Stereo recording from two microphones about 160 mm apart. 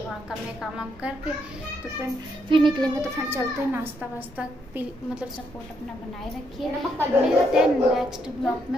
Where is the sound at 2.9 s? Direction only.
15° right (ahead or behind).